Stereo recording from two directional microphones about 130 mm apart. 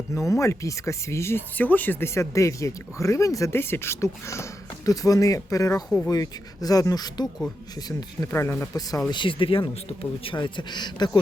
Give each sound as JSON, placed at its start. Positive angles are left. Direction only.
{"t": 0.1, "sound": "speech", "side_deg": 25}
{"t": 9.0, "sound": "speech", "side_deg": 40}